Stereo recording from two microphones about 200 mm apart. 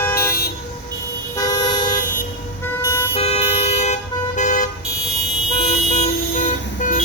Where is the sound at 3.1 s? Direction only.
30° left (ahead or behind).